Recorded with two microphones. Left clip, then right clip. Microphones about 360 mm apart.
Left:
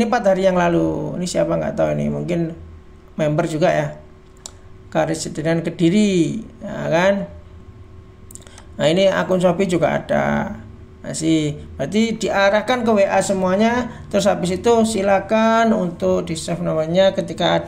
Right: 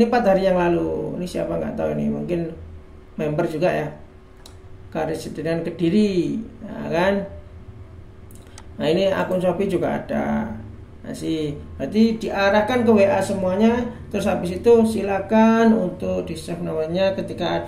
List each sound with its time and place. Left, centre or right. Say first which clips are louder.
0.0 s speech: left 1 dB; left
4.9 s speech: left 5 dB; left
8.7 s speech: left 4 dB; left